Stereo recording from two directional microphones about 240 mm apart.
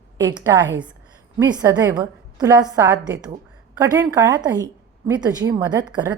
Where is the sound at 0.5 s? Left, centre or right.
Centre.